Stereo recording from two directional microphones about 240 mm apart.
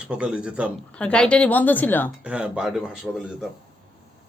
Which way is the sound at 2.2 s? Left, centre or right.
Centre.